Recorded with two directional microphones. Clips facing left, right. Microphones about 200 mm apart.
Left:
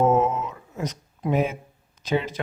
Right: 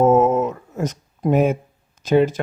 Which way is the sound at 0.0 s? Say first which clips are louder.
Right 6 dB; 45° right (ahead or behind).